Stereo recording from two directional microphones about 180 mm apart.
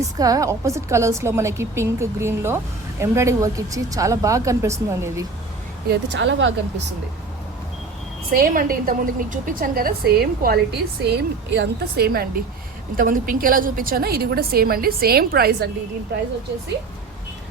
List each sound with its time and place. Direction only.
0.2 s a woman's voice: 20° right (ahead or behind)
5.9 s speech: 90° right
8.3 s a woman's voice: 50° right (ahead or behind)